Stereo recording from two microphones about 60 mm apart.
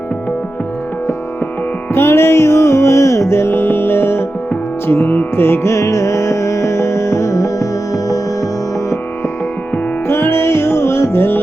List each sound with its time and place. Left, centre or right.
1.9 s music: left
10.1 s music: left